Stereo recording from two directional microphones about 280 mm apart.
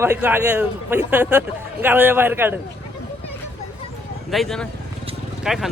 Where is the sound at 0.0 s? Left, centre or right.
Centre.